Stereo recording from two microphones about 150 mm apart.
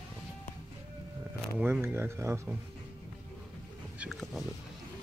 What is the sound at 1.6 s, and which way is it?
Speech, 10° right (ahead or behind).